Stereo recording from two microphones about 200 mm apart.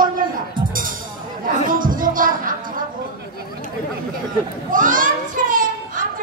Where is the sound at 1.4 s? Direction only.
45° right (ahead or behind).